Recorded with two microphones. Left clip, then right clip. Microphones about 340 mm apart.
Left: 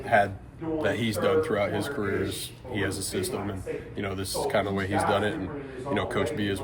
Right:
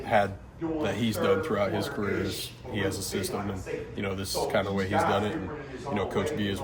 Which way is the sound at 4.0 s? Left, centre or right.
Centre.